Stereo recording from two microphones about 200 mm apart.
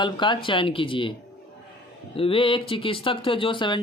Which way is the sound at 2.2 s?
25° left (ahead or behind).